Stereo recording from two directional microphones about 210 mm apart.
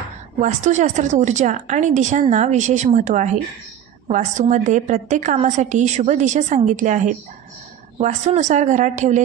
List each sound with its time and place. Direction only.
0.4 s a woman's voice: 35° right (ahead or behind)